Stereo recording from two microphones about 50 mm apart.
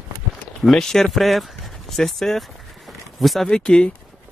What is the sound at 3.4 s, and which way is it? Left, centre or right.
Speech, centre.